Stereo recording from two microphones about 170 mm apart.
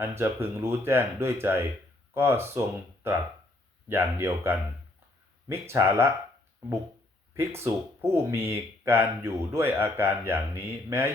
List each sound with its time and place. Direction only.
0.0 s speech: 15° right (ahead or behind)
7.3 s speech: 15° right (ahead or behind)